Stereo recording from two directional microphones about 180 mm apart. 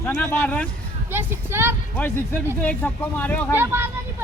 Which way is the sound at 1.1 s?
10° right (ahead or behind).